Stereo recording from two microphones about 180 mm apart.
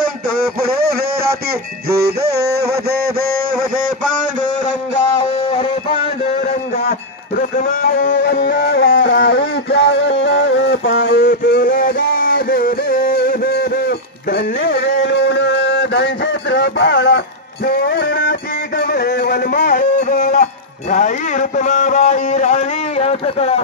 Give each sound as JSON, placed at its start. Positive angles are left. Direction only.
{"t": 0.4, "sound": "music", "side_deg": -55}
{"t": 1.9, "sound": "a sound", "side_deg": -60}
{"t": 6.8, "sound": "music", "side_deg": 55}
{"t": 11.6, "sound": "music", "side_deg": 50}
{"t": 17.6, "sound": "music", "side_deg": 60}
{"t": 20.9, "sound": "a sound", "side_deg": 45}